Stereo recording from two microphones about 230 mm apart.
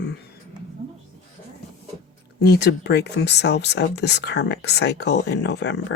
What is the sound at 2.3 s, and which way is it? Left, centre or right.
Speech, left.